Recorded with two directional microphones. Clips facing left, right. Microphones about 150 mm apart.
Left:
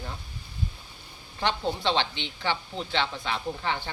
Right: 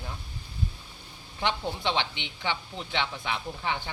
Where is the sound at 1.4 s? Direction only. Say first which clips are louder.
Left 2 dB; 15° right (ahead or behind).